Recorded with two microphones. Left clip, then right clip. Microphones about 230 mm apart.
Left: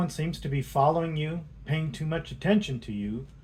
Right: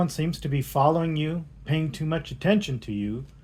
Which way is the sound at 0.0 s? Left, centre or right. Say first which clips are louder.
Right 5 dB; right.